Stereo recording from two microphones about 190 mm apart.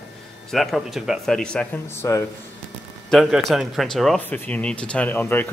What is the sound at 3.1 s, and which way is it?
Speech, centre (ahead or behind).